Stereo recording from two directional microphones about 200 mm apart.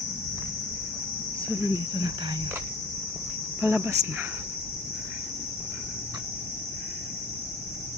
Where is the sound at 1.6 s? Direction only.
20° right (ahead or behind).